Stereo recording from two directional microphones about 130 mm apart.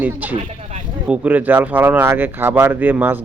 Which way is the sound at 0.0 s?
15° right (ahead or behind).